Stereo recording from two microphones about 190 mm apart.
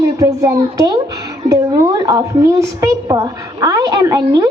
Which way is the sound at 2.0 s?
15° right (ahead or behind).